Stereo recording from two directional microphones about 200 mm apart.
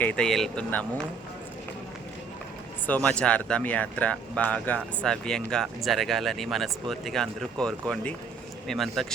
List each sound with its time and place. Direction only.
0.0 s speech: 5° left (ahead or behind)
2.8 s speech: 5° left (ahead or behind)